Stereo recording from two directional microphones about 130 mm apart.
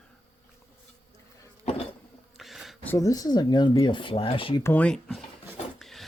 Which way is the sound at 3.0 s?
25° left (ahead or behind).